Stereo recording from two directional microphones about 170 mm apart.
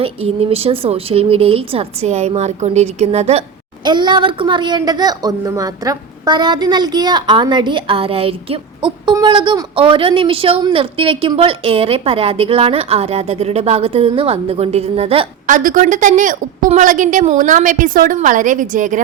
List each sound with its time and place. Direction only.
0.0 s a woman's voice: 35° right (ahead or behind)
3.8 s a woman's voice: 25° right (ahead or behind)
15.4 s a woman's voice: 50° right (ahead or behind)